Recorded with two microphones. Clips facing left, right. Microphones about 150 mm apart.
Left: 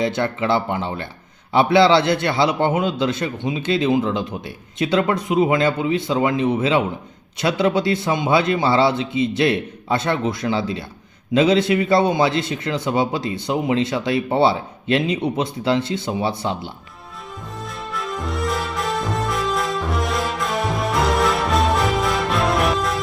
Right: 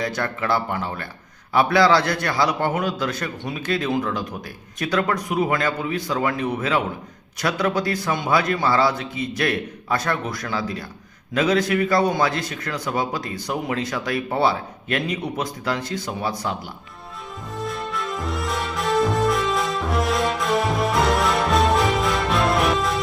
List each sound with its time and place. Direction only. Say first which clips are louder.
0.0 s a man's voice: left 5 dB; 25° left (ahead or behind)
17.6 s music: right 3 dB; centre (ahead or behind)